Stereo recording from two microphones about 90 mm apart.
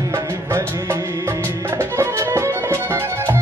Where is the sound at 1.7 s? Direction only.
30° right (ahead or behind).